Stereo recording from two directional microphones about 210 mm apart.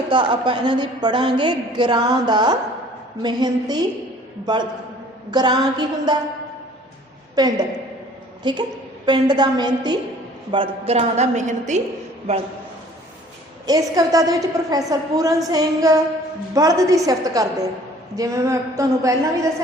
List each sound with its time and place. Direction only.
0.1 s a woman's voice: 25° right (ahead or behind)
7.3 s a woman's voice: 20° right (ahead or behind)
13.7 s a woman's voice: 15° right (ahead or behind)